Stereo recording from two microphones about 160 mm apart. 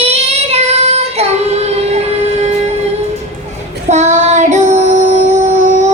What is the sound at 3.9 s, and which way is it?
Child singing, 45° right (ahead or behind).